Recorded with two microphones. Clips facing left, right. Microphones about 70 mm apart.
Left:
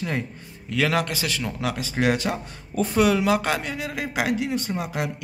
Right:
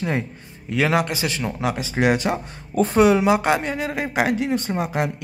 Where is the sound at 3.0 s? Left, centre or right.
Right.